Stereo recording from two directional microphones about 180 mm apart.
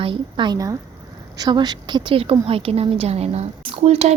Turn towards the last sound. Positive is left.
turn(degrees=-35)  # may be behind; listen again after turning